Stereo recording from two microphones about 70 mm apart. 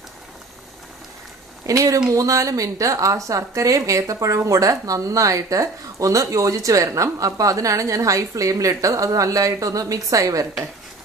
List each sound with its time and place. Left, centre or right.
1.7 s speech: right